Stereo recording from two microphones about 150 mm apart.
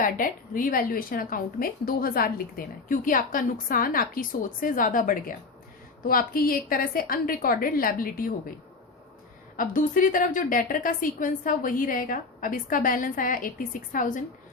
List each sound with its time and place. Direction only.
0.0 s a woman's voice: 65° left (ahead or behind)
9.6 s a woman's voice: 60° left (ahead or behind)